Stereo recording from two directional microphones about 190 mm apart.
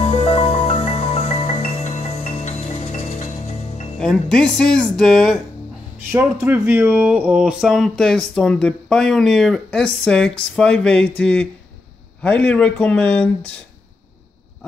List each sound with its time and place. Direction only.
0.0 s music: 40° left (ahead or behind)
4.0 s speech: 5° left (ahead or behind)
6.1 s speech: 10° right (ahead or behind); by 13.3 s 5° left (ahead or behind)